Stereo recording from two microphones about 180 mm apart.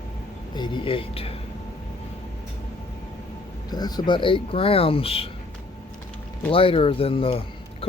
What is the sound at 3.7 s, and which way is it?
Speech, 20° left (ahead or behind).